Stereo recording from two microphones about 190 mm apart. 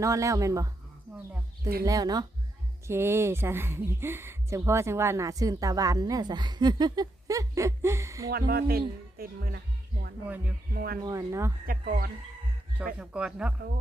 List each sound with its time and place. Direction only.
0.0 s speech: 15° right (ahead or behind)
1.8 s speech: 20° right (ahead or behind)
8.3 s speech: 55° right (ahead or behind)
10.2 s speech: 10° right (ahead or behind)
10.8 s speech: 50° right (ahead or behind)
11.0 s speech: 15° right (ahead or behind)
11.6 s speech: 50° right (ahead or behind)
12.8 s speech: 5° right (ahead or behind)